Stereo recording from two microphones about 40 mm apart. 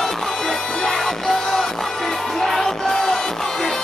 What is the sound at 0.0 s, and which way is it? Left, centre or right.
Music, centre.